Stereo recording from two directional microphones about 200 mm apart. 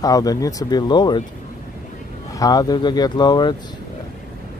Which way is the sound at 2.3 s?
20° left (ahead or behind).